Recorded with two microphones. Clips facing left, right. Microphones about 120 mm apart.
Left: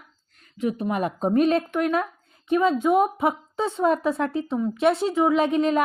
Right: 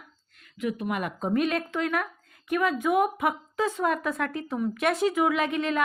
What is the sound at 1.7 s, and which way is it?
A woman's voice, 20° left (ahead or behind).